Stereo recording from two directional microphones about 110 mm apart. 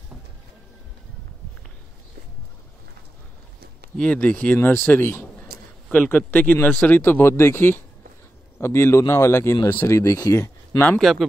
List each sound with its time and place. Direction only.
3.9 s speech: 10° left (ahead or behind); by 10.8 s 30° left (ahead or behind)
11.0 s speech: centre (ahead or behind)